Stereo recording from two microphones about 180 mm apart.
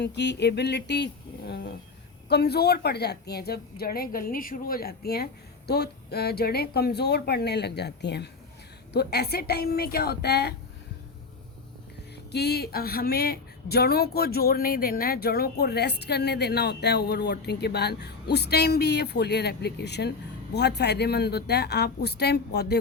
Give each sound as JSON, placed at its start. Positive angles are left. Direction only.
{"t": 0.0, "sound": "speech", "side_deg": 70}
{"t": 12.3, "sound": "speech", "side_deg": 65}